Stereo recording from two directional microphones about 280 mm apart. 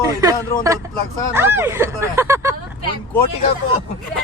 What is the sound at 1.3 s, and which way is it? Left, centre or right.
Speech, centre.